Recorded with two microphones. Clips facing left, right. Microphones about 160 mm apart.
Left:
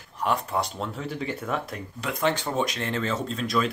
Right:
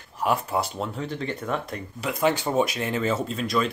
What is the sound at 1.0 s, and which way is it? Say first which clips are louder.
Speech: right 1 dB; 5° left (ahead or behind).